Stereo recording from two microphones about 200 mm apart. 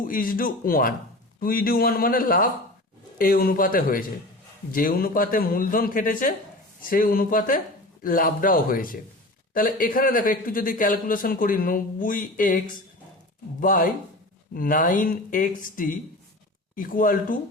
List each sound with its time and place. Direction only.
0.0 s a man's voice: 45° left (ahead or behind)
13.6 s a man's voice: 40° left (ahead or behind)